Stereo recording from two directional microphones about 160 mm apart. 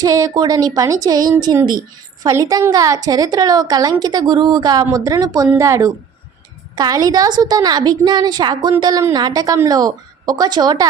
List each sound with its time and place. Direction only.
0.0 s a woman's voice: 20° right (ahead or behind)